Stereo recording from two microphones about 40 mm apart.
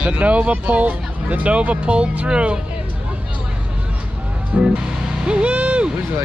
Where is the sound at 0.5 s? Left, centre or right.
Right.